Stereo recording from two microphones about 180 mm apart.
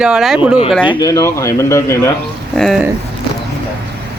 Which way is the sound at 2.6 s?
Centre (ahead or behind).